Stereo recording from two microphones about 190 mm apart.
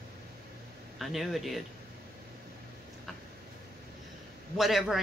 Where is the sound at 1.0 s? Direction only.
Centre (ahead or behind).